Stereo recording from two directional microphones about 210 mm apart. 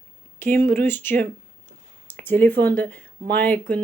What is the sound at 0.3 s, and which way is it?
Speech, 10° left (ahead or behind).